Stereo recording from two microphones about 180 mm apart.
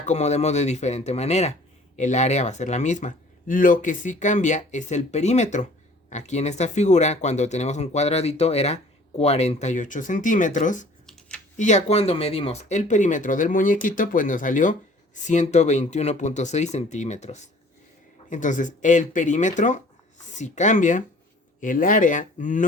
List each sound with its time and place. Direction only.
0.0 s speech: 40° left (ahead or behind)